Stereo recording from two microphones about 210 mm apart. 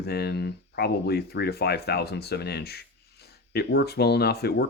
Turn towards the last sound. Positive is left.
turn(degrees=50)  # may be behind; listen again after turning